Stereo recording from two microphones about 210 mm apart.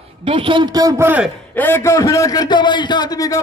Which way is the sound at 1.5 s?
10° left (ahead or behind).